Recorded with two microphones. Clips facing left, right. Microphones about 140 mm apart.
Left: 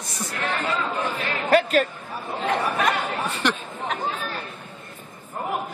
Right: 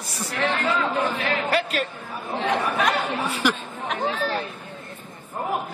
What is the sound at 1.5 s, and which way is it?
Speech, 45° left (ahead or behind).